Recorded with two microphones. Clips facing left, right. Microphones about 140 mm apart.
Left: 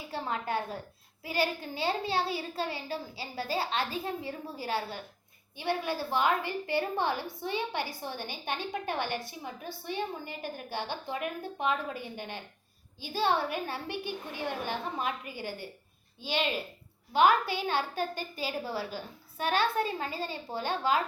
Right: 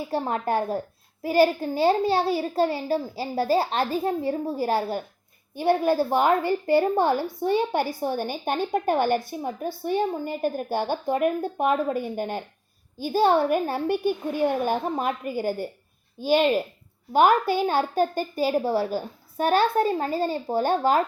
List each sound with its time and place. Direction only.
0.1 s a woman's voice: 45° right (ahead or behind)